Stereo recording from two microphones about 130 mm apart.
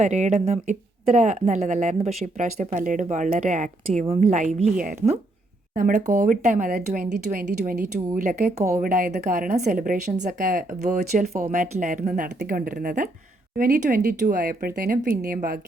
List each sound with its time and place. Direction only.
0.0 s speech: 60° right (ahead or behind)
4.0 s speech: 55° right (ahead or behind)
4.8 s speech: 75° right (ahead or behind)
8.5 s a woman's voice: 25° right (ahead or behind)
8.8 s speech: 90° right
13.6 s speech: 80° right